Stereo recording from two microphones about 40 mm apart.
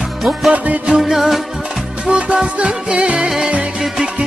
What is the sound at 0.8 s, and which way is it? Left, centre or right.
Music, centre.